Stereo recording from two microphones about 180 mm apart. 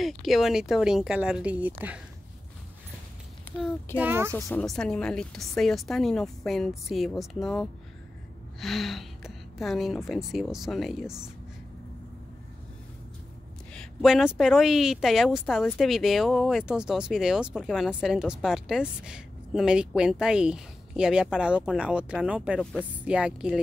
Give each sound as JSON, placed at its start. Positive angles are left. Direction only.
{"t": 0.0, "sound": "speech", "side_deg": 0}
{"t": 4.0, "sound": "speech", "side_deg": -10}
{"t": 4.3, "sound": "speech", "side_deg": 10}
{"t": 13.7, "sound": "speech", "side_deg": 0}